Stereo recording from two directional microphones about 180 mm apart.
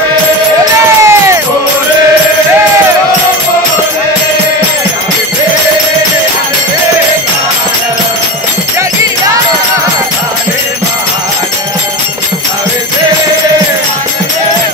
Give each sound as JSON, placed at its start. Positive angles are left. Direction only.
{"t": 1.0, "sound": "music", "side_deg": -15}